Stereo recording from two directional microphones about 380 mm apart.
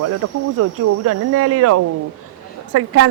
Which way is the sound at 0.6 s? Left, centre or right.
Right.